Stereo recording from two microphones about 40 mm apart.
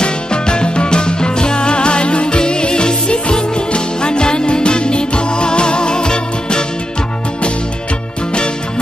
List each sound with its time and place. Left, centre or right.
0.0 s music: left